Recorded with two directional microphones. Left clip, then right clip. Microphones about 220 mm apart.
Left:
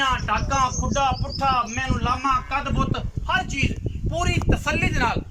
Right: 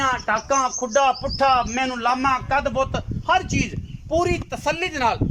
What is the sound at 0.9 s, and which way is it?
A man's voice, 40° right (ahead or behind).